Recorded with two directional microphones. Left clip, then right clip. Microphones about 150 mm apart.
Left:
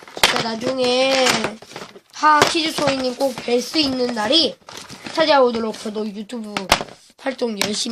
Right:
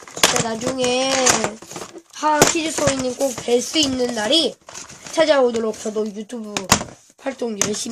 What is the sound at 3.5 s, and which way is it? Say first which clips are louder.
Speech: right 3 dB; 25° left (ahead or behind).